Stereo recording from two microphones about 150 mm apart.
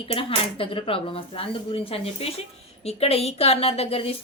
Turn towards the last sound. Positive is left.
turn(degrees=40)  # may be behind; listen again after turning